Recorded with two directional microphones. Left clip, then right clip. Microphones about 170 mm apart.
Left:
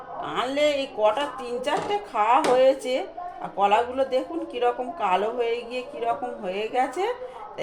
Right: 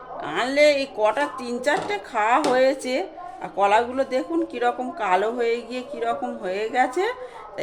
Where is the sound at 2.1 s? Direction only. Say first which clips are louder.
Even; 45° right (ahead or behind).